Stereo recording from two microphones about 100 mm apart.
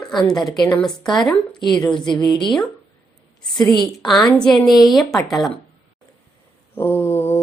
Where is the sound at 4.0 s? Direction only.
Centre (ahead or behind).